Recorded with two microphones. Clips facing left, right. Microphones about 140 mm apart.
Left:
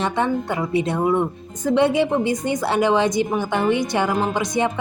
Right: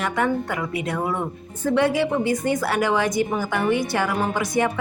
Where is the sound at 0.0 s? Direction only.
25° left (ahead or behind).